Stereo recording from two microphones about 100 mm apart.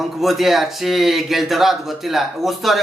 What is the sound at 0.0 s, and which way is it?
Speech, centre (ahead or behind).